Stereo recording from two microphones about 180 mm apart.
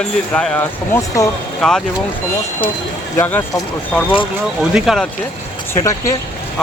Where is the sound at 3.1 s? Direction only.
10° left (ahead or behind).